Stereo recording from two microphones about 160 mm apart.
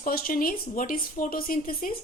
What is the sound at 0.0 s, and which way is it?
A woman's voice, 65° left (ahead or behind).